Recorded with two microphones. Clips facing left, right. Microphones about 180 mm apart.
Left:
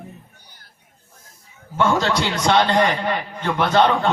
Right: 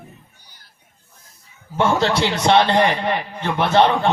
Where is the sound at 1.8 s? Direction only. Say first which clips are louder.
Right 1 dB; 25° right (ahead or behind).